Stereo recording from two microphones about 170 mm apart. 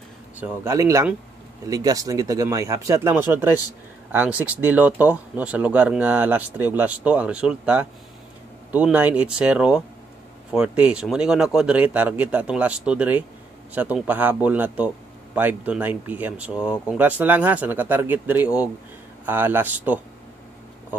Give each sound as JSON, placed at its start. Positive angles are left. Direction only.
{"t": 0.4, "sound": "speech", "side_deg": -15}